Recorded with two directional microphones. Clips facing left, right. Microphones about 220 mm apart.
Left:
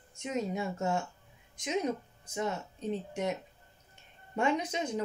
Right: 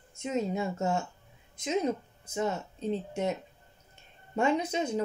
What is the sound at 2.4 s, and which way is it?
Speech, 30° right (ahead or behind).